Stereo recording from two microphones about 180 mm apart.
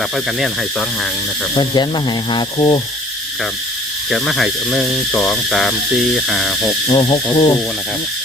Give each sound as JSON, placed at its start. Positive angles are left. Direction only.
{"t": 0.3, "sound": "speech", "side_deg": 0}
{"t": 1.5, "sound": "speech", "side_deg": 25}
{"t": 4.1, "sound": "speech", "side_deg": 0}
{"t": 6.8, "sound": "speech", "side_deg": 30}